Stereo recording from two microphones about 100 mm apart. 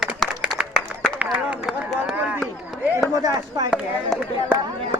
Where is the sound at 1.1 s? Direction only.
10° right (ahead or behind).